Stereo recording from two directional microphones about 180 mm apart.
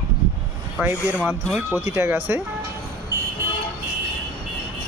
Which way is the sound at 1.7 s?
10° right (ahead or behind).